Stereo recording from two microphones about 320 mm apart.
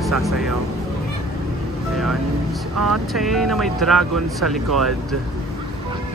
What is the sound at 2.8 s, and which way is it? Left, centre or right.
Speech, centre.